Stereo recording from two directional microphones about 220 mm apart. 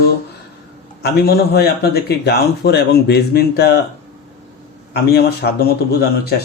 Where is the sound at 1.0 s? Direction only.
45° left (ahead or behind).